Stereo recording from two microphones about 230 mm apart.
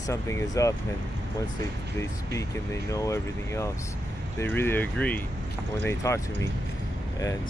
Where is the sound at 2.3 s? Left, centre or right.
Centre.